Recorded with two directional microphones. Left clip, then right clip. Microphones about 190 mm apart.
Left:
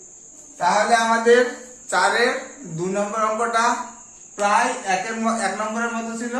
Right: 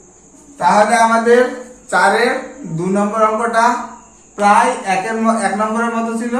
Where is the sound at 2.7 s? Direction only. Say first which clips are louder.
Right 6 dB; 25° left (ahead or behind).